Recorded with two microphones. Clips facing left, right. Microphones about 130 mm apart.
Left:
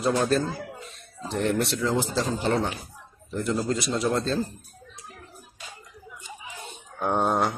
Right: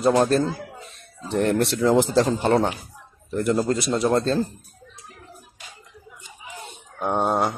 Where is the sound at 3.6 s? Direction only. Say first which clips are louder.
Right 4 dB; 50° right (ahead or behind).